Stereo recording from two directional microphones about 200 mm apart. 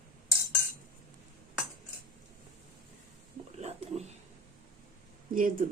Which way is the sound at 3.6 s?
35° right (ahead or behind).